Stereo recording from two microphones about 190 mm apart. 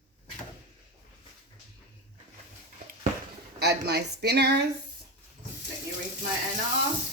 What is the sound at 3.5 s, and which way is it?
Speech, 60° right (ahead or behind).